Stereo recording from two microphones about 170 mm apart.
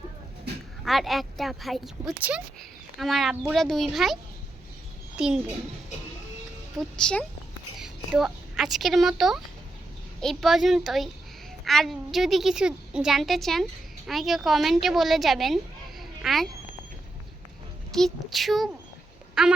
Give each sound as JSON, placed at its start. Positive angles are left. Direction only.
{"t": 0.9, "sound": "a woman's voice", "side_deg": 0}
{"t": 6.7, "sound": "a woman's voice", "side_deg": 5}
{"t": 17.9, "sound": "a woman's voice", "side_deg": 0}
{"t": 19.3, "sound": "a sound", "side_deg": -5}